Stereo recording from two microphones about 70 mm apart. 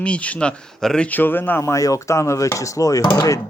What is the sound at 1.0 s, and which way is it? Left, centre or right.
Speech, left.